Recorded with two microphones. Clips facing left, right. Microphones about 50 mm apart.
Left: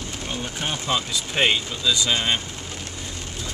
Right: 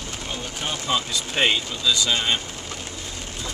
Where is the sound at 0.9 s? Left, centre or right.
Centre.